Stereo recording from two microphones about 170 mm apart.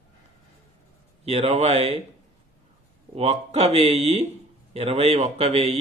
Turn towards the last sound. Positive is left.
turn(degrees=-40)  # may be behind; listen again after turning